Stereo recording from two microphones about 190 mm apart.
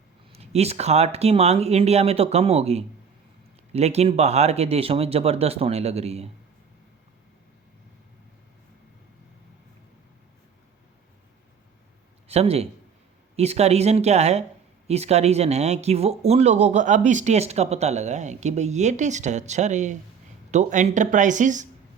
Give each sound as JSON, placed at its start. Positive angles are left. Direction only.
{"t": 0.3, "sound": "speech", "side_deg": -35}
{"t": 12.3, "sound": "speech", "side_deg": -30}